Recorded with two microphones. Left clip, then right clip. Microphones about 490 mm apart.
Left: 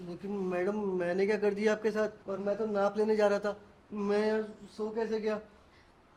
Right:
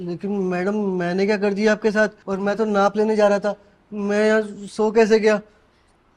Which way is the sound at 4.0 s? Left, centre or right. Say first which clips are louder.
Right 12 dB; right.